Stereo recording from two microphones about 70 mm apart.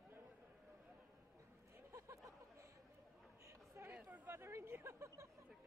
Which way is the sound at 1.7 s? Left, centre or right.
Right.